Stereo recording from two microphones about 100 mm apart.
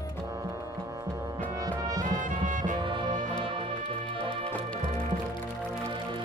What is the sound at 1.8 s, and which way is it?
Music, 40° right (ahead or behind).